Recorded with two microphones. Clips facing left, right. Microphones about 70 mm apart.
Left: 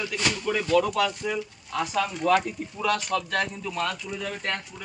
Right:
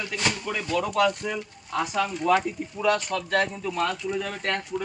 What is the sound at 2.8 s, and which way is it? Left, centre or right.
Speech, right.